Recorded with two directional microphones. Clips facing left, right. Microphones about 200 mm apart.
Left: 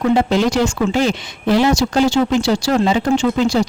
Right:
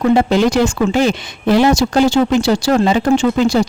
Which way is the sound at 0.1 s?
55° right (ahead or behind).